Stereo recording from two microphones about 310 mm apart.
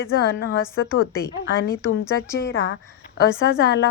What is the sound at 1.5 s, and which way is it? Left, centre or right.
A woman's voice, left.